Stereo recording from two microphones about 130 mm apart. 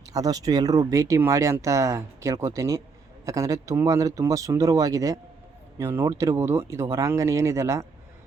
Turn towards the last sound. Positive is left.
turn(degrees=-25)  # may be behind; listen again after turning